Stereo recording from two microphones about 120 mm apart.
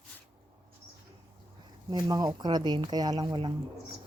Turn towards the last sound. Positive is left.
turn(degrees=-35)  # may be behind; listen again after turning